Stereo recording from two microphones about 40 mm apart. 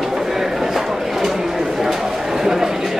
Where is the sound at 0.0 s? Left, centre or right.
Centre.